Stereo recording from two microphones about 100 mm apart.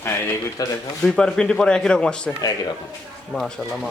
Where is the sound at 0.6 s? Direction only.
40° left (ahead or behind).